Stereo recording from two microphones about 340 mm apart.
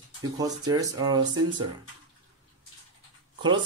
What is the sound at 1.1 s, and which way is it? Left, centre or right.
Speech, right.